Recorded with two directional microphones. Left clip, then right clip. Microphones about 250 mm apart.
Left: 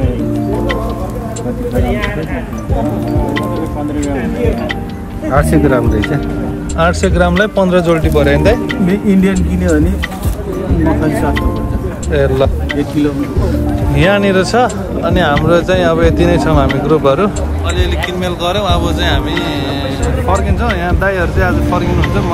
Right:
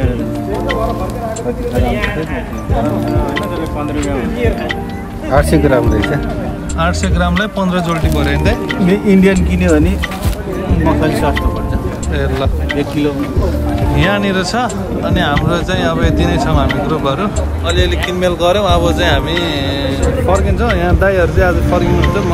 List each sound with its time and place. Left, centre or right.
5.3 s speech: right
6.8 s speech: centre
8.8 s speech: right
12.1 s speech: centre
13.9 s speech: centre